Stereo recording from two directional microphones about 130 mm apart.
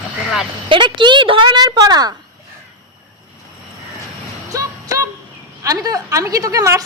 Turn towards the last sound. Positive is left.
turn(degrees=-25)  # may be behind; listen again after turning